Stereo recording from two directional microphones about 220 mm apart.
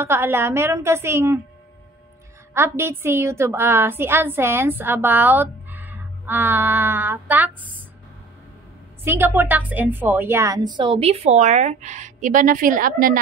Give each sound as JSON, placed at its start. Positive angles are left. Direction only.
{"t": 0.0, "sound": "a woman's voice", "side_deg": -10}
{"t": 2.5, "sound": "a woman's voice", "side_deg": -10}
{"t": 9.0, "sound": "a woman's voice", "side_deg": -10}